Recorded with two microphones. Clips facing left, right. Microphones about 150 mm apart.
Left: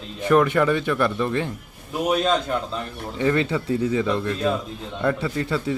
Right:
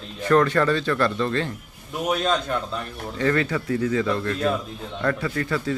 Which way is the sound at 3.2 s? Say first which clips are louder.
Left 1 dB; 20° left (ahead or behind).